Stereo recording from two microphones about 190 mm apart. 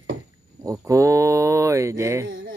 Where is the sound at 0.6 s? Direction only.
15° right (ahead or behind).